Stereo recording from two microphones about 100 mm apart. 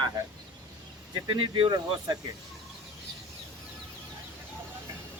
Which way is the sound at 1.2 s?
55° right (ahead or behind).